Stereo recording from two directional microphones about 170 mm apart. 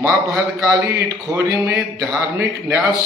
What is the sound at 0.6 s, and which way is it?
A man's voice, 15° right (ahead or behind).